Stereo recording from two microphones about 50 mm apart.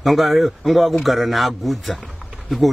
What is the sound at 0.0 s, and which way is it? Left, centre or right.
Speech, centre.